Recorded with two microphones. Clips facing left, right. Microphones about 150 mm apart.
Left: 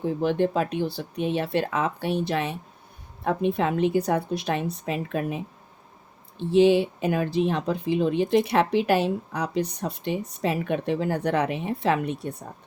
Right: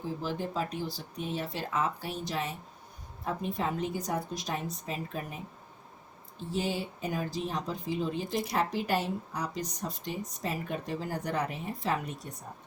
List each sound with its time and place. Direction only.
0.0 s speech: 60° left (ahead or behind)
6.5 s speech: 75° left (ahead or behind)